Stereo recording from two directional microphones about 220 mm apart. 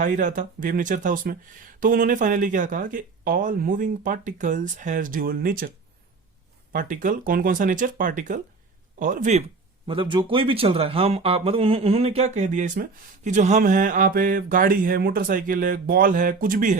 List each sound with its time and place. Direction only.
0.0 s speech: 35° right (ahead or behind)
6.7 s speech: 35° right (ahead or behind)
9.8 s speech: 25° right (ahead or behind)